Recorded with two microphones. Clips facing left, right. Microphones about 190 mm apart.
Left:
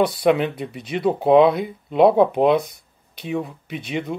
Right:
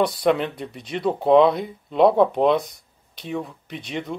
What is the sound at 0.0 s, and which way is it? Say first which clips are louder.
Speech: left 2 dB; 5° left (ahead or behind).